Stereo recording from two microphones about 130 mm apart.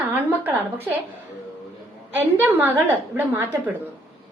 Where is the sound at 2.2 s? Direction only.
15° right (ahead or behind).